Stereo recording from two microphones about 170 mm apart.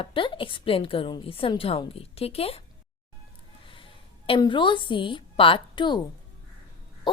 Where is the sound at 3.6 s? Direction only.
30° left (ahead or behind).